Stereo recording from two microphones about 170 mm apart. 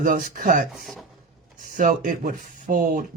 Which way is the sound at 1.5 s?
50° right (ahead or behind).